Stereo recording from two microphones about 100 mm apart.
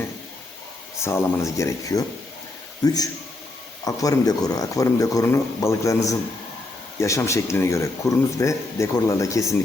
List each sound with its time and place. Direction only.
0.9 s speech: 25° left (ahead or behind)